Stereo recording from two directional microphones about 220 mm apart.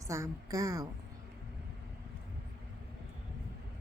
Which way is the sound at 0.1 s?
15° right (ahead or behind).